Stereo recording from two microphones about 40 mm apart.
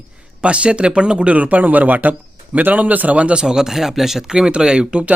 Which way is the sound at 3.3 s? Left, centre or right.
Centre.